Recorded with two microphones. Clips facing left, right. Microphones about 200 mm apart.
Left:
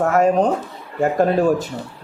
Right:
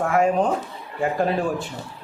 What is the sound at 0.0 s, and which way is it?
Speech, 40° left (ahead or behind).